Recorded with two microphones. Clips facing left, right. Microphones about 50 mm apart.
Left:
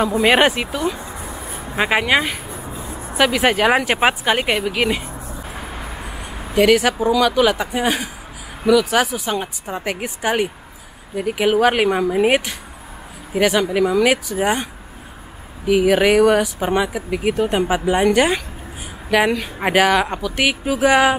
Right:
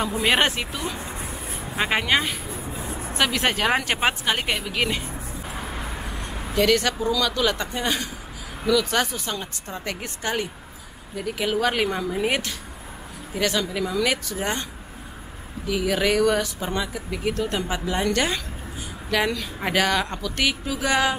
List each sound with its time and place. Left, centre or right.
0.1 s speech: centre
9.4 s speech: left
16.5 s speech: left
16.9 s speech: centre
20.6 s speech: left